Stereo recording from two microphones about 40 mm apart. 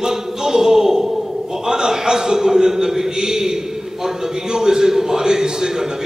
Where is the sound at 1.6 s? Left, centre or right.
Centre.